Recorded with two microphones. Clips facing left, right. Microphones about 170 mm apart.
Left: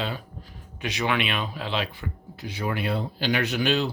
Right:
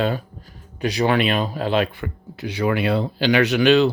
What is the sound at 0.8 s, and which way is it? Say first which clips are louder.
Speech: right 7 dB; 35° right (ahead or behind).